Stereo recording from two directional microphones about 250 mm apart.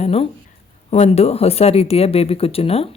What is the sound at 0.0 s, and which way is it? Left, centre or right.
Speech, left.